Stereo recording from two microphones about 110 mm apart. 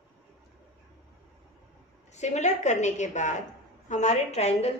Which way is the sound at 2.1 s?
90° left.